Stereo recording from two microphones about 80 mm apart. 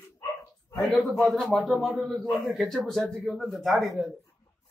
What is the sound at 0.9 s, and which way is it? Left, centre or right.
A man's voice, centre.